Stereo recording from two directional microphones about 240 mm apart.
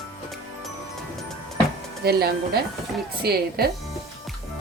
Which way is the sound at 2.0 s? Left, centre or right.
Right.